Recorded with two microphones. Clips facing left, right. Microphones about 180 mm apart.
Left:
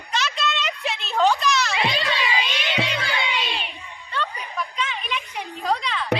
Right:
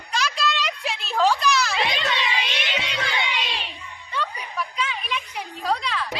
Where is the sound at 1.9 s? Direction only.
40° left (ahead or behind).